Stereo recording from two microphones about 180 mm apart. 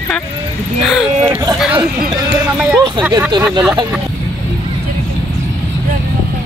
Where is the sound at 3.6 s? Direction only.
5° right (ahead or behind).